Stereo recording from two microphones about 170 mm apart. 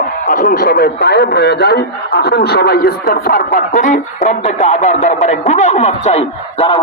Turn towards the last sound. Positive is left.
turn(degrees=40)  # may be behind; listen again after turning